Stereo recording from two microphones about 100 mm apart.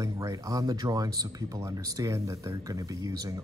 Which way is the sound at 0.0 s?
35° right (ahead or behind).